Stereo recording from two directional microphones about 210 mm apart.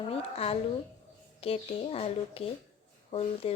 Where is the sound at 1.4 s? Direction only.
30° left (ahead or behind).